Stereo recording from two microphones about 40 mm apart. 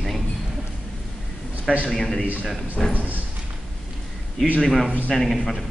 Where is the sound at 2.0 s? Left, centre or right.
Centre.